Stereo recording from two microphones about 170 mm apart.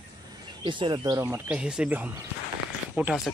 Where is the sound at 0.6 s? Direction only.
30° right (ahead or behind).